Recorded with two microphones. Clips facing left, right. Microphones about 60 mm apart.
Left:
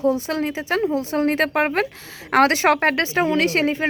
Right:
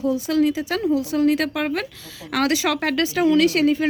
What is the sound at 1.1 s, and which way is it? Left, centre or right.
Speech, left.